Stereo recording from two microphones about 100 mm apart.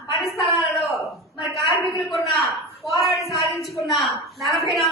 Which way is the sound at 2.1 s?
Centre (ahead or behind).